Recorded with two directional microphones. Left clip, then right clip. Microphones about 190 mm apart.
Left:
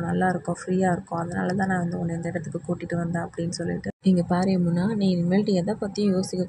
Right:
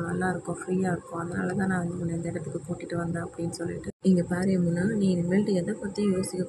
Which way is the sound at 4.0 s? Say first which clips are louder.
Left 3 dB; 20° left (ahead or behind).